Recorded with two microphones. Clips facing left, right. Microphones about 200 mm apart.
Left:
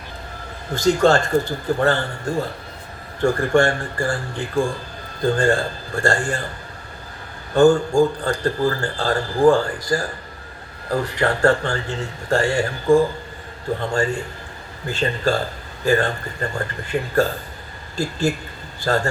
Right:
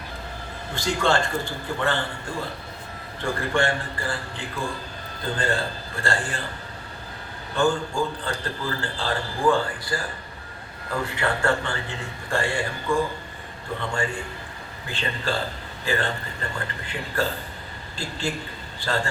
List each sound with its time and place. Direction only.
0.7 s a man's voice: 40° left (ahead or behind)
7.5 s a man's voice: 45° left (ahead or behind)
14.8 s a man's voice: 45° left (ahead or behind)